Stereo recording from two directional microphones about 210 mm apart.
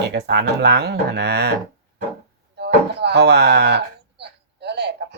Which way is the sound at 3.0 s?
55° right (ahead or behind).